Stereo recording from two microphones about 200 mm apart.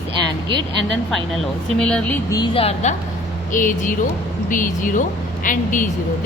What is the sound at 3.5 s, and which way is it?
Speech, 40° left (ahead or behind).